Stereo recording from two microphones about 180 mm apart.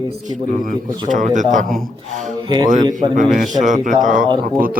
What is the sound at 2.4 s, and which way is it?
Speech, 25° right (ahead or behind).